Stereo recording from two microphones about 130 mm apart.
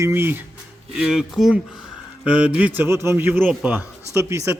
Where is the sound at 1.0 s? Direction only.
5° right (ahead or behind).